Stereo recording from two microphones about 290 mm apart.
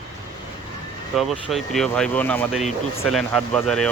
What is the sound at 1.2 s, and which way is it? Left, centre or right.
Speech, centre.